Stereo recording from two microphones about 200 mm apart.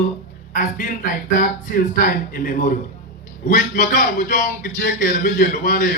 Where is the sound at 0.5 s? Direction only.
40° left (ahead or behind).